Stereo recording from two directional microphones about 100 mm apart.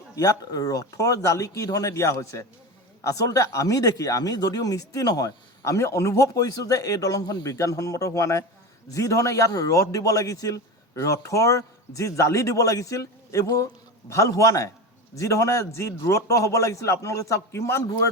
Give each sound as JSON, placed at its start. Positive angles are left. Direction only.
{"t": 0.2, "sound": "speech", "side_deg": 40}